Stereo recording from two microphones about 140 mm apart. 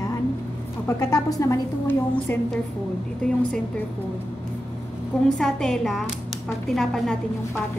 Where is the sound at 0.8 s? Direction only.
25° left (ahead or behind).